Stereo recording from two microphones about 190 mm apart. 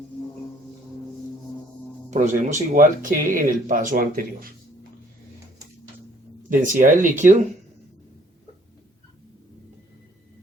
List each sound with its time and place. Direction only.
2.0 s speech: 40° right (ahead or behind)
6.5 s speech: 45° right (ahead or behind)